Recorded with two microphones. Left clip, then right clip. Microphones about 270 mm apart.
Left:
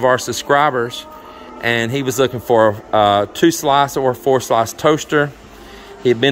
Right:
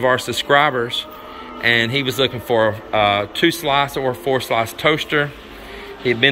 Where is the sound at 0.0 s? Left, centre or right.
Centre.